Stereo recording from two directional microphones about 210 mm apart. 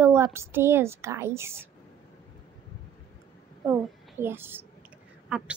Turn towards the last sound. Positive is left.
turn(degrees=-5)  # may be behind; listen again after turning